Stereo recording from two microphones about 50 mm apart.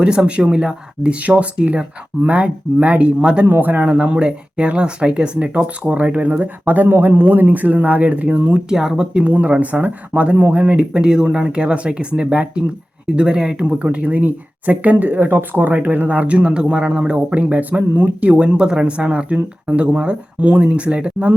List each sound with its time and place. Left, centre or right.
0.0 s speech: centre
3.4 s speech: right
3.8 s speech: right
8.7 s speech: centre